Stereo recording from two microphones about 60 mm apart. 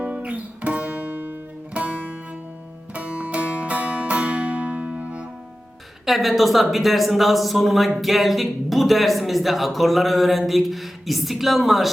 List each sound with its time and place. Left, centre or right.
0.0 s guitar: right
2.9 s music: right
6.1 s speech: centre